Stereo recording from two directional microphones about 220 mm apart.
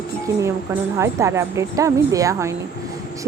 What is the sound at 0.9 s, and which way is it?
Speech, 10° right (ahead or behind).